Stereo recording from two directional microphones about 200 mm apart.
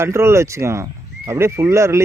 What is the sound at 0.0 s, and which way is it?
Speech, 15° right (ahead or behind).